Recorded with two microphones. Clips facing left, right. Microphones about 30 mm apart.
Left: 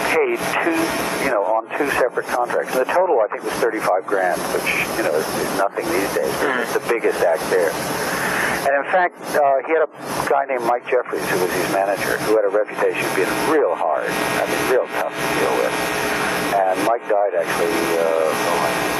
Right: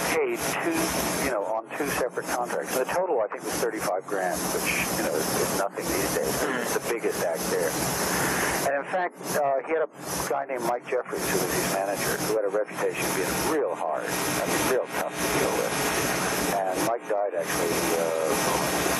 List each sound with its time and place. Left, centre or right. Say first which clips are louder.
0.1 s speech: left 8 dB; left
13.5 s speech: left 10 dB; left